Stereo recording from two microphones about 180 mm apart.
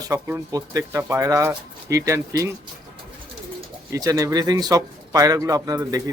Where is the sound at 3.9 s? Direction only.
20° right (ahead or behind).